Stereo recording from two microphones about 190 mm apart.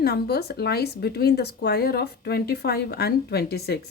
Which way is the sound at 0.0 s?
55° left (ahead or behind).